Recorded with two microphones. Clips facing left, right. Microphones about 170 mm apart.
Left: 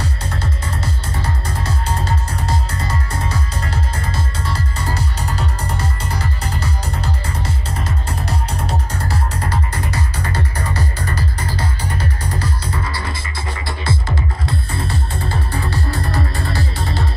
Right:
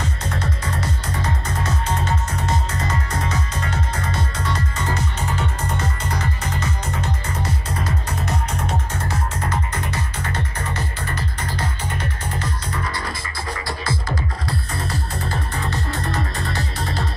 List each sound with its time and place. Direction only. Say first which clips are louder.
0.0 s music: left 1 dB; 30° left (ahead or behind)